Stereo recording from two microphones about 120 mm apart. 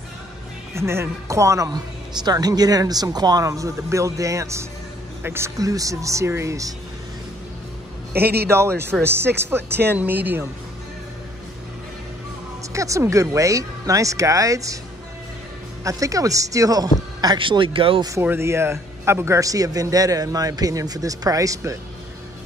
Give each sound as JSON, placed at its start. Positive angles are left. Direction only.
{"t": 0.7, "sound": "a man's voice", "side_deg": -20}
{"t": 8.5, "sound": "a man's voice", "side_deg": -20}
{"t": 12.7, "sound": "a man's voice", "side_deg": -25}
{"t": 15.8, "sound": "a man's voice", "side_deg": -25}
{"t": 17.2, "sound": "speech", "side_deg": -40}
{"t": 18.2, "sound": "a man's voice", "side_deg": -20}